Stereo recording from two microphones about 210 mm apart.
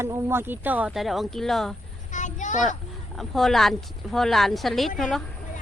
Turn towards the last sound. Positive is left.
turn(degrees=0)  # may be behind; listen again after turning